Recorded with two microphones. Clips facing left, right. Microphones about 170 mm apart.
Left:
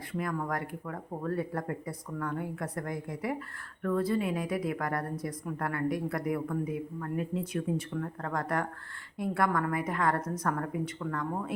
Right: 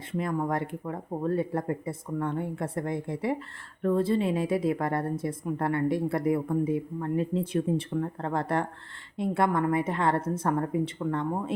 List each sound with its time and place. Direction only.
0.1 s a woman's voice: 25° right (ahead or behind)